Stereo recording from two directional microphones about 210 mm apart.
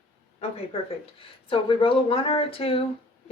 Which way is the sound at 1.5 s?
25° left (ahead or behind).